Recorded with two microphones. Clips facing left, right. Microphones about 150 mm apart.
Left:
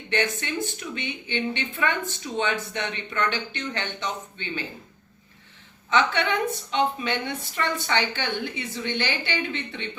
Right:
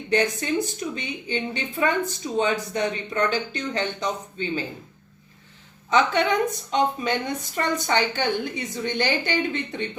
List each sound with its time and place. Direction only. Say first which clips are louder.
0.1 s a woman's voice: right 4 dB; 35° right (ahead or behind)
5.9 s a woman's voice: right 3 dB; 40° right (ahead or behind)